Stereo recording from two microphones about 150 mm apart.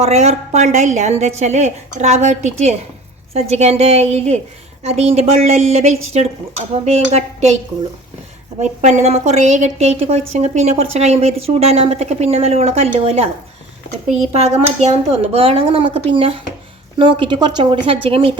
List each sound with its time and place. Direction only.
0.0 s a woman's voice: 50° right (ahead or behind)
8.6 s a woman's voice: 50° right (ahead or behind)